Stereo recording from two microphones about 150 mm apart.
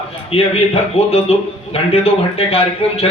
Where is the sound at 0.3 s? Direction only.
40° left (ahead or behind).